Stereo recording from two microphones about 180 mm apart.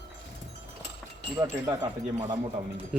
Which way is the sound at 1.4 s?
20° right (ahead or behind).